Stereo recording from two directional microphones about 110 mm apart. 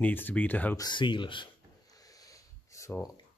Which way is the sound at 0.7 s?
40° left (ahead or behind).